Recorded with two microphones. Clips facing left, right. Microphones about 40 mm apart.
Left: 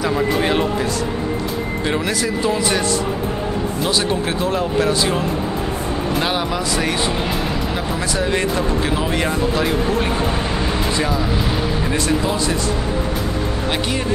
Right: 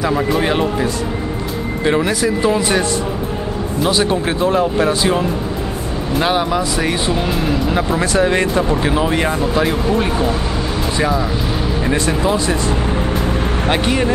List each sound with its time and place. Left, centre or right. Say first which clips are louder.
0.0 s speech: right 2 dB; centre
1.9 s speech: right 6 dB; centre
3.9 s speech: right 3 dB; centre
8.0 s speech: right 4 dB; right
13.7 s speech: right 7 dB; right